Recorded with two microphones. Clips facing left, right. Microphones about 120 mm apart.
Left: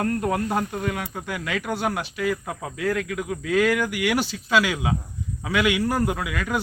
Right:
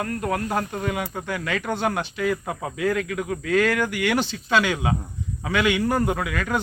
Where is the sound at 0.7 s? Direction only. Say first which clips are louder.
Right 1 dB; centre (ahead or behind).